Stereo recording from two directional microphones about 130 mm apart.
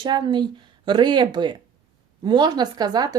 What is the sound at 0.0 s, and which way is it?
Speech, 35° right (ahead or behind).